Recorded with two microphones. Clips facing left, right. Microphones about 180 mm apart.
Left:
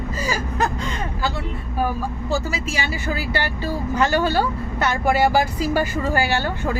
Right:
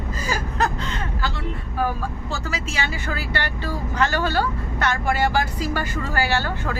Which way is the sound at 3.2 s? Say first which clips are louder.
Left 3 dB; 10° left (ahead or behind).